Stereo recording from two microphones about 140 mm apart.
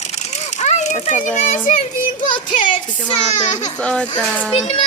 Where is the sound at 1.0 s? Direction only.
55° left (ahead or behind).